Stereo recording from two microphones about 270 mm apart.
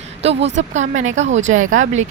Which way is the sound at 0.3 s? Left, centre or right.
Right.